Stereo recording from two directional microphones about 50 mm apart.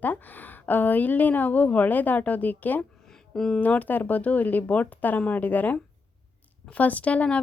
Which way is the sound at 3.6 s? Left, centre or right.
Left.